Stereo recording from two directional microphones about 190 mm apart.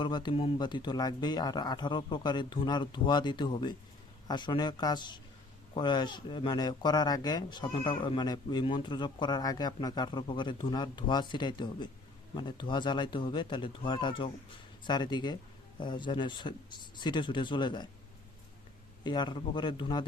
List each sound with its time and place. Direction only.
0.0 s speech: 25° left (ahead or behind)
19.0 s speech: 25° left (ahead or behind)